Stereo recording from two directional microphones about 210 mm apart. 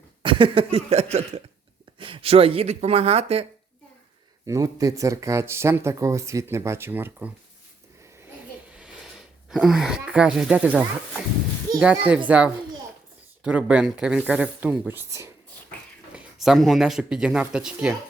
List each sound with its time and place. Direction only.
0.2 s a sound: 25° right (ahead or behind)
2.0 s speech: 25° right (ahead or behind)
4.4 s speech: 15° right (ahead or behind)
9.5 s speech: centre (ahead or behind)
13.4 s speech: 5° right (ahead or behind)
16.1 s speech: centre (ahead or behind)